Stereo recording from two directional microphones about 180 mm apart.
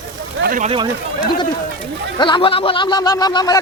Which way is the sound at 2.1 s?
25° left (ahead or behind).